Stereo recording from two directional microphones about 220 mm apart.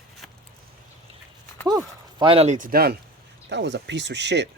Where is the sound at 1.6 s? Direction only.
20° right (ahead or behind); by 2.9 s 40° right (ahead or behind).